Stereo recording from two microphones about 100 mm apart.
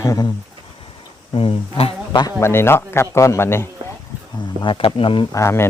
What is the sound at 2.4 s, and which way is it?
A man's voice, 25° left (ahead or behind).